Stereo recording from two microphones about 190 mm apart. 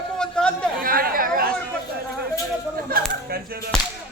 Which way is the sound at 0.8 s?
50° right (ahead or behind).